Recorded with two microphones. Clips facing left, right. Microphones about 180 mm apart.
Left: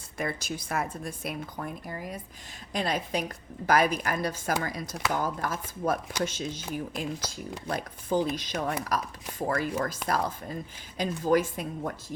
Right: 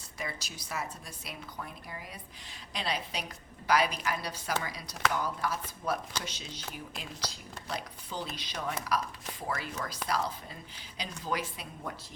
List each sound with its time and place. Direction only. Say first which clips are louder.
0.2 s speech: left 8 dB; 50° left (ahead or behind)